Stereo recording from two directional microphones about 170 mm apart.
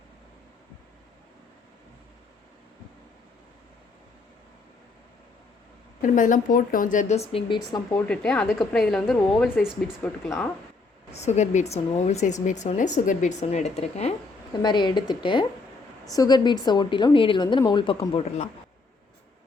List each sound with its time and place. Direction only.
6.0 s a woman's voice: 50° left (ahead or behind); by 7.8 s 30° left (ahead or behind)
7.9 s a woman's voice: 5° left (ahead or behind)
11.1 s speech: 40° left (ahead or behind)
14.6 s a woman's voice: 25° left (ahead or behind)